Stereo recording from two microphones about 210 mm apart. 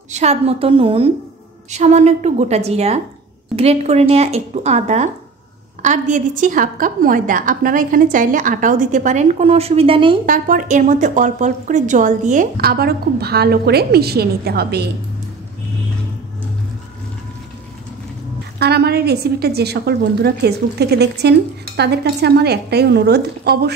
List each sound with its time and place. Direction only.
0.1 s a woman's voice: 30° right (ahead or behind)
10.2 s a woman's voice: 40° right (ahead or behind)
18.6 s a woman's voice: 50° right (ahead or behind)